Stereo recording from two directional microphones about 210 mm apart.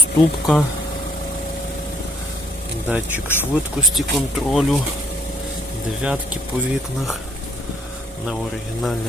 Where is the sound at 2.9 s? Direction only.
5° right (ahead or behind).